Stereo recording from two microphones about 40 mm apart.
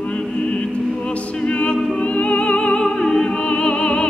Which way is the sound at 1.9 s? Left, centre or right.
Left.